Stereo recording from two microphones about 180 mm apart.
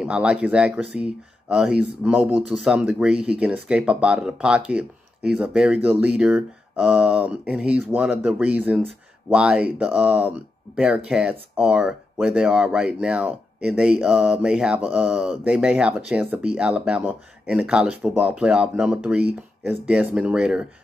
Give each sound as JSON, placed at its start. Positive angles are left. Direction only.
{"t": 0.0, "sound": "speech", "side_deg": -5}